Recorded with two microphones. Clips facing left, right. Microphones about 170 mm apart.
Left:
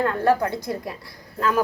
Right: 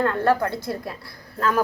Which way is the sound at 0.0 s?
10° left (ahead or behind).